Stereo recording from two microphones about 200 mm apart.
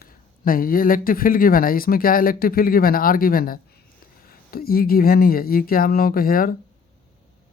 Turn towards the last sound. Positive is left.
turn(degrees=45)  # may be behind; listen again after turning